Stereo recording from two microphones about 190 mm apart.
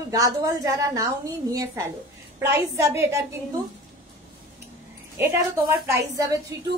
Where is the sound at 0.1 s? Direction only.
20° right (ahead or behind).